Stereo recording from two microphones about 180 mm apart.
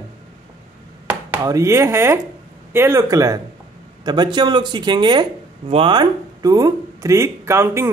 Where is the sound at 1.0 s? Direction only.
15° right (ahead or behind).